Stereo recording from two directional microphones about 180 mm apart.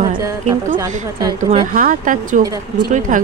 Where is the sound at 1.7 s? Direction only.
50° right (ahead or behind).